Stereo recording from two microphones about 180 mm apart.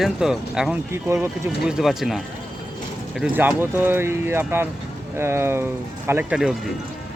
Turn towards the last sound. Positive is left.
turn(degrees=-5)  # may be behind; listen again after turning